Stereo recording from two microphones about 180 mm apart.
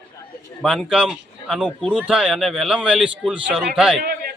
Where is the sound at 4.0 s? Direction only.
55° right (ahead or behind).